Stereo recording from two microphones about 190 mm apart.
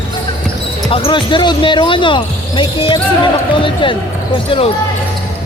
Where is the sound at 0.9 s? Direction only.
30° left (ahead or behind).